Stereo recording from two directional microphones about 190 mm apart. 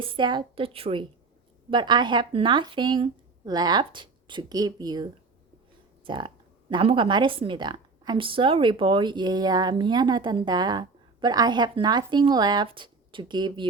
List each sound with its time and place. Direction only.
0.0 s speech: 25° right (ahead or behind)
6.1 s speech: 25° right (ahead or behind)